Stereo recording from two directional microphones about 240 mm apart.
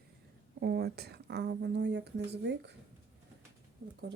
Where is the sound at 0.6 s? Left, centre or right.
Right.